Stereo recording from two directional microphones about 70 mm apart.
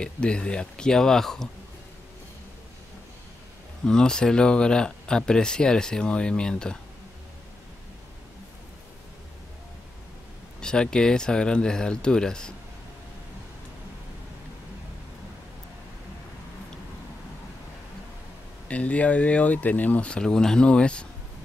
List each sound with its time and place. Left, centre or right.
0.0 s speech: centre
3.8 s speech: centre
10.6 s speech: centre
18.7 s speech: centre